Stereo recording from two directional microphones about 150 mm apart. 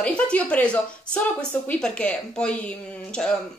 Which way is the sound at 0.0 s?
10° left (ahead or behind).